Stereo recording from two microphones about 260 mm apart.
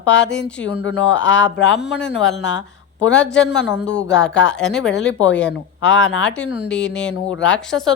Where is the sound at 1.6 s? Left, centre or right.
Left.